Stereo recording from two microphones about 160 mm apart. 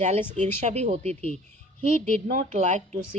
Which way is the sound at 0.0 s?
45° right (ahead or behind).